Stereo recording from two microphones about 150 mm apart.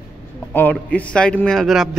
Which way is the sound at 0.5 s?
10° left (ahead or behind).